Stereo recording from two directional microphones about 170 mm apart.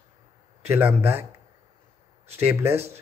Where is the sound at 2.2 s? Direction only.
40° right (ahead or behind).